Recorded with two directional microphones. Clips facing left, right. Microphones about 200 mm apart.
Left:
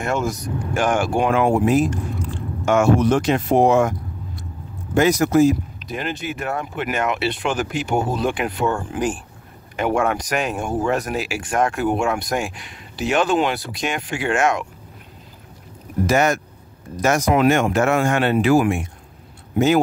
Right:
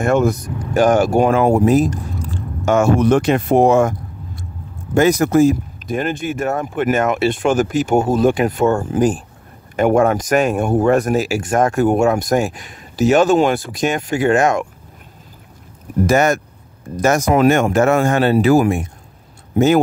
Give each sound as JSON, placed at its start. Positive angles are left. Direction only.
{"t": 0.0, "sound": "speech", "side_deg": -55}
{"t": 0.6, "sound": "speech", "side_deg": -40}
{"t": 3.0, "sound": "speech", "side_deg": -55}
{"t": 4.9, "sound": "speech", "side_deg": -50}
{"t": 16.1, "sound": "speech", "side_deg": -45}